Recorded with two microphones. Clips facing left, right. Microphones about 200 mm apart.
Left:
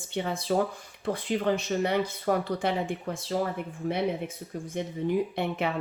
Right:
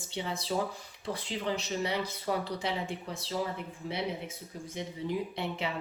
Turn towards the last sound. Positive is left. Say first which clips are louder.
# left 6 dB
turn(degrees=55)  # may be behind; listen again after turning